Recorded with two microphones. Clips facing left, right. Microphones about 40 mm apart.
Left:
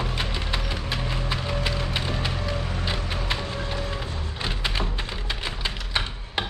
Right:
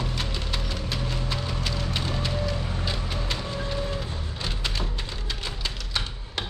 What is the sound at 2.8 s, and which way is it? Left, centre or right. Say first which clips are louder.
Music: left 2 dB; left.